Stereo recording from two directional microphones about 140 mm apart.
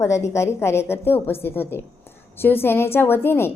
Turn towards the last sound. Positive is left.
turn(degrees=15)  # may be behind; listen again after turning